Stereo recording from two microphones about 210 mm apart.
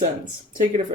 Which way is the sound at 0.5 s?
40° right (ahead or behind).